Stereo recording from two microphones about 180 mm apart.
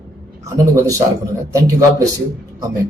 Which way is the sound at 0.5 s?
20° right (ahead or behind).